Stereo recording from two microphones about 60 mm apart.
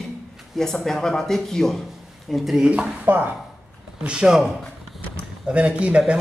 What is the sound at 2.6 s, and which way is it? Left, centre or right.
Speech, centre.